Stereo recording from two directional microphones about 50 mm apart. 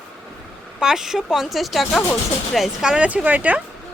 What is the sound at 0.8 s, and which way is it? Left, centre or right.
A woman's voice, centre.